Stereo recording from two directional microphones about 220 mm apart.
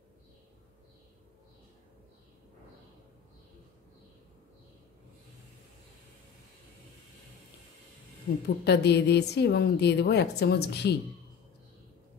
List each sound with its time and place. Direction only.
8.6 s a woman's voice: 50° left (ahead or behind)